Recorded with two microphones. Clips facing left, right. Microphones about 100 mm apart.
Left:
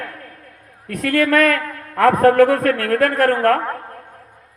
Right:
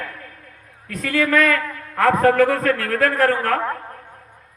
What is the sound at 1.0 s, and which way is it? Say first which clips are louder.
Speech: left 3 dB; 60° left (ahead or behind).